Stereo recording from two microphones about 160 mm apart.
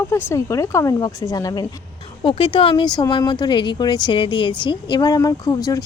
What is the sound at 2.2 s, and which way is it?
A woman's voice, 35° left (ahead or behind).